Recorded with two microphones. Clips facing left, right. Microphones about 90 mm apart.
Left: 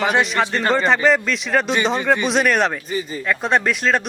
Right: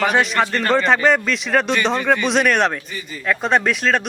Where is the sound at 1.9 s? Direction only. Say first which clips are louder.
Even; 20° left (ahead or behind).